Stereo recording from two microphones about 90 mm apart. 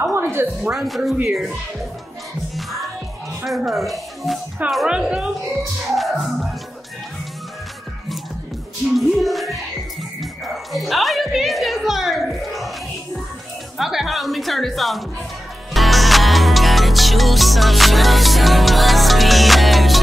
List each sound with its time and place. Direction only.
0.0 s a sound: 30° right (ahead or behind)
0.6 s speech: 5° right (ahead or behind)
2.5 s music: centre (ahead or behind)
3.4 s speech: centre (ahead or behind)
5.9 s speech: centre (ahead or behind)
8.9 s speech: centre (ahead or behind)
10.4 s music: centre (ahead or behind)
13.7 s speech: centre (ahead or behind)
15.7 s music: centre (ahead or behind)